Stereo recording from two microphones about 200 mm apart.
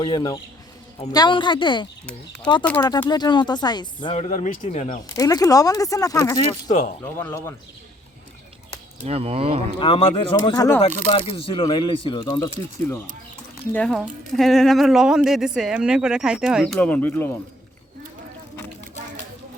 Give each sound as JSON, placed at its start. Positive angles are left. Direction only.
{"t": 0.0, "sound": "speech", "side_deg": 20}
{"t": 5.1, "sound": "speech", "side_deg": 15}
{"t": 9.0, "sound": "speech", "side_deg": -30}
{"t": 9.7, "sound": "speech", "side_deg": 25}
{"t": 11.1, "sound": "speech", "side_deg": 25}
{"t": 13.7, "sound": "speech", "side_deg": 5}